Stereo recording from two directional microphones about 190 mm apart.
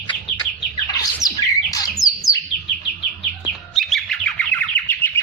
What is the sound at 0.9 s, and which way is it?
Bird, 20° left (ahead or behind).